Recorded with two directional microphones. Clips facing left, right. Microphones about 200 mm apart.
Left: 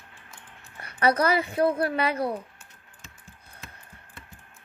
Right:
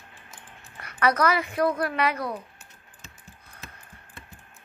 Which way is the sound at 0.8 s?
30° left (ahead or behind).